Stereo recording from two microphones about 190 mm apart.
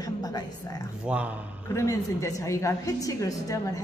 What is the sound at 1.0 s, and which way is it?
Speech, 5° right (ahead or behind).